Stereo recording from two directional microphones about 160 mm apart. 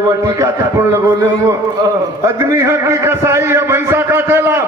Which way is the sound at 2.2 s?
15° right (ahead or behind).